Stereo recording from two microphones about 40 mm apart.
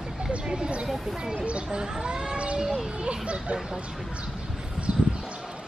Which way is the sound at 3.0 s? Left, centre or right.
Right.